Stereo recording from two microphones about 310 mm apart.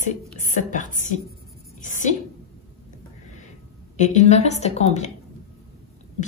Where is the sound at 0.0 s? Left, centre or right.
Left.